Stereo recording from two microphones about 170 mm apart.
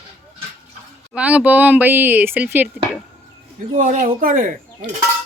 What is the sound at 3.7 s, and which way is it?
Speech, 50° right (ahead or behind).